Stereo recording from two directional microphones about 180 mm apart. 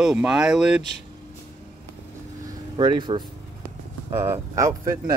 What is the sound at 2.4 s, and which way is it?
Vehicle, 25° right (ahead or behind).